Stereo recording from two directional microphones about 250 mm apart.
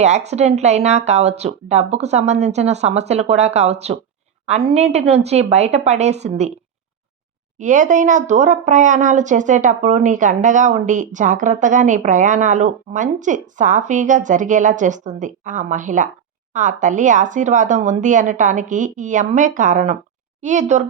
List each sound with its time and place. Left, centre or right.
0.3 s speech: right
7.6 s speech: right